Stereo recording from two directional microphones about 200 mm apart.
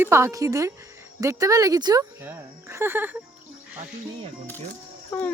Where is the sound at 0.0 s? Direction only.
15° right (ahead or behind).